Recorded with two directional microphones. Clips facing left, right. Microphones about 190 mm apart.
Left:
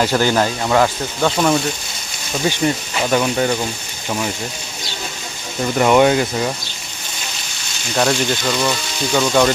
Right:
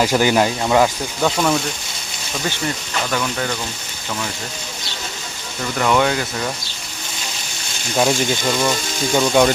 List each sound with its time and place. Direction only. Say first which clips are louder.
0.0 s speech: even; 10° right (ahead or behind)
1.2 s speech: left 2 dB; 5° left (ahead or behind); by 3.7 s 25° left (ahead or behind)
5.7 s speech: left 5 dB; 20° left (ahead or behind)
7.9 s speech: even; 5° right (ahead or behind)